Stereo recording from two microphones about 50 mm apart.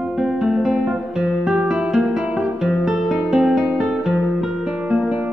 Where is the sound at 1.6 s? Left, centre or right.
Centre.